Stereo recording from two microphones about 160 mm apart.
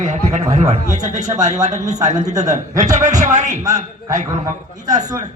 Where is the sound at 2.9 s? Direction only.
45° right (ahead or behind).